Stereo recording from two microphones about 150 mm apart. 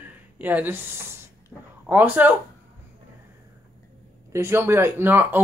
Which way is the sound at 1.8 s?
10° right (ahead or behind).